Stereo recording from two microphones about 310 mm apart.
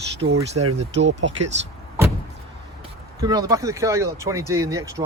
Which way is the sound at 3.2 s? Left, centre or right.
Centre.